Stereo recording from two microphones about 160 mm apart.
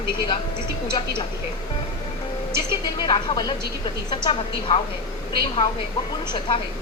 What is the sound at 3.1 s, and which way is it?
A woman's voice, 25° left (ahead or behind).